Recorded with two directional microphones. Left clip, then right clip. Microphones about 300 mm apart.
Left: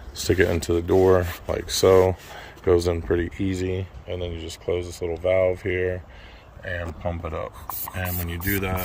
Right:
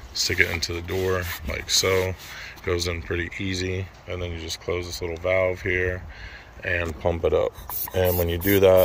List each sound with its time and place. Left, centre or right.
0.5 s speech: left
6.6 s speech: centre